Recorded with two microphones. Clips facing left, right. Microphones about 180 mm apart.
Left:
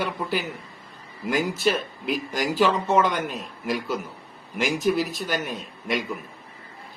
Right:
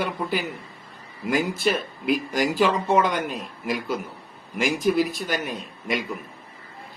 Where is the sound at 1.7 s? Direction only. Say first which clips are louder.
Right 3 dB; 45° right (ahead or behind).